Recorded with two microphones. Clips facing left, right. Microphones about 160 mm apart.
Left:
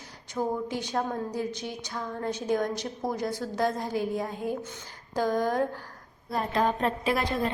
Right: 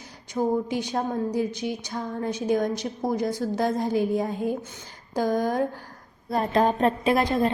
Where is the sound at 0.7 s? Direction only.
15° right (ahead or behind).